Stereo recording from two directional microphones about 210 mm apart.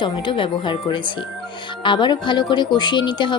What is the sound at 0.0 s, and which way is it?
Speech, 25° left (ahead or behind).